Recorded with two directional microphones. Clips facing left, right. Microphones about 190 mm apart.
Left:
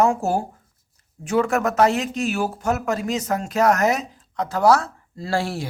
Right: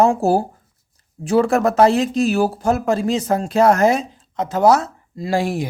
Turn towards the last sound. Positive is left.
turn(degrees=-15)  # may be behind; listen again after turning